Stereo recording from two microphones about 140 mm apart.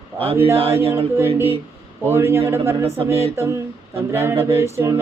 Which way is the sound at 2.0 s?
15° right (ahead or behind).